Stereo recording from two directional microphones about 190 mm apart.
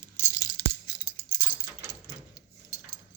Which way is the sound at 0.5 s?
25° left (ahead or behind).